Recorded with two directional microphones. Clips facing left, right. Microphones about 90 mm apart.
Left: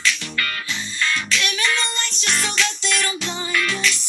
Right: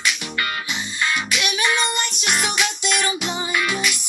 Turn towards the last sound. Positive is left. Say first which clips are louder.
# even
turn(degrees=-15)  # may be behind; listen again after turning